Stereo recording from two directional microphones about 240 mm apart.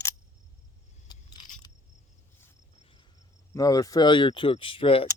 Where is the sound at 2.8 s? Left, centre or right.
Left.